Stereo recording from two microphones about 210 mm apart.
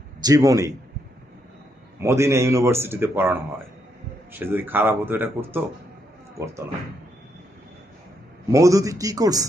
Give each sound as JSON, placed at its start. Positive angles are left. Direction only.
{"t": 0.2, "sound": "a man's voice", "side_deg": -15}
{"t": 2.0, "sound": "a man's voice", "side_deg": -15}
{"t": 8.4, "sound": "a man's voice", "side_deg": -15}